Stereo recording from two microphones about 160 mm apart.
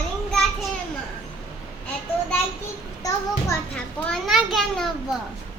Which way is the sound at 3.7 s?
5° left (ahead or behind).